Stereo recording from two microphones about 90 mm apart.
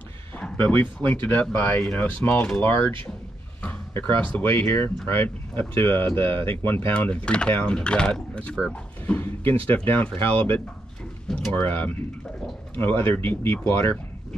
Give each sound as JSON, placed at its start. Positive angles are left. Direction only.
{"t": 0.4, "sound": "speech", "side_deg": 20}
{"t": 4.4, "sound": "speech", "side_deg": 25}
{"t": 11.6, "sound": "speech", "side_deg": 20}